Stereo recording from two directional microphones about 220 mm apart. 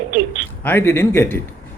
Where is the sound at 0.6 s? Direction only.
10° left (ahead or behind).